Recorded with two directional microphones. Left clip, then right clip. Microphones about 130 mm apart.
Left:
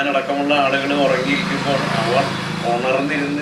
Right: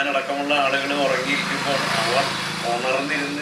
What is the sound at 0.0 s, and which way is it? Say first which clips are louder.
A man's voice: left 4 dB; 10° left (ahead or behind).